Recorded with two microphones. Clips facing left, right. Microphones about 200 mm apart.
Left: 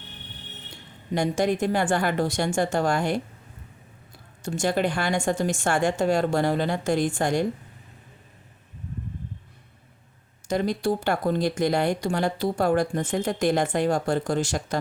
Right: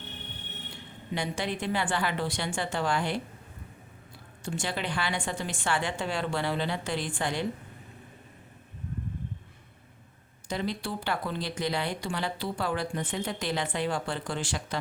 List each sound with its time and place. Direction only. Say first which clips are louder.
1.1 s speech: left 9 dB; 45° left (ahead or behind)
4.4 s speech: left 9 dB; 45° left (ahead or behind)
10.5 s speech: left 8 dB; 45° left (ahead or behind)